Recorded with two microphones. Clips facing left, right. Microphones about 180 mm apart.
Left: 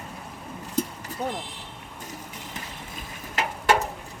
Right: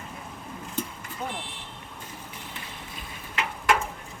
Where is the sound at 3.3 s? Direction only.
35° left (ahead or behind).